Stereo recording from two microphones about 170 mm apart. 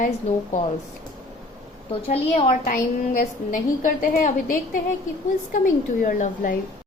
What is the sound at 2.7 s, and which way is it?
A woman's voice, 55° left (ahead or behind).